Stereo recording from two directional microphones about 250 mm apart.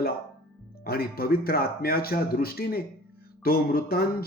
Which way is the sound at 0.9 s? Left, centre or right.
Left.